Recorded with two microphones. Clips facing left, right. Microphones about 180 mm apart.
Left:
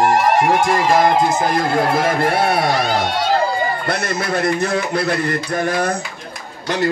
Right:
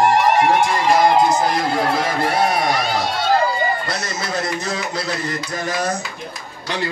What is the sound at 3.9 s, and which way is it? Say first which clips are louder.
Speech: left 4 dB; 60° left (ahead or behind).